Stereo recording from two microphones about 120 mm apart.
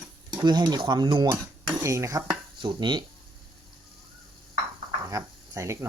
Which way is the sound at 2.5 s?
40° right (ahead or behind).